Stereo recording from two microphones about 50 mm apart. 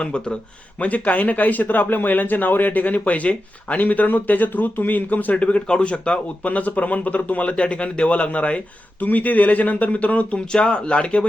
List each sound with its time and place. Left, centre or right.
0.0 s a man's voice: left